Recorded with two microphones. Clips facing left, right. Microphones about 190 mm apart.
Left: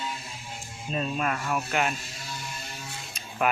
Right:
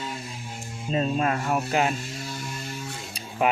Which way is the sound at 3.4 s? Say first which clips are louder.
Right 3 dB; 25° right (ahead or behind).